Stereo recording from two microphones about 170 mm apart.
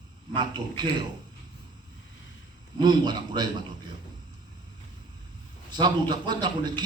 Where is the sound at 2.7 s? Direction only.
25° right (ahead or behind).